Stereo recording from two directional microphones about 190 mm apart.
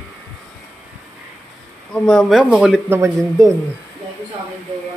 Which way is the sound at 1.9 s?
5° left (ahead or behind).